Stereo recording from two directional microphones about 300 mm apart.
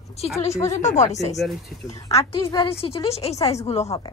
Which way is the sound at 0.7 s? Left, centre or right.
Left.